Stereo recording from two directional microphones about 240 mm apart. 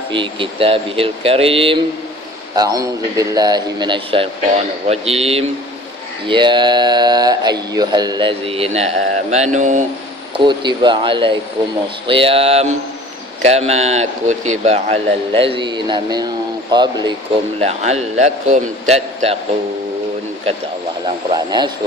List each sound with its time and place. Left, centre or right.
0.1 s speech: right
10.3 s speech: centre
21.0 s speech: centre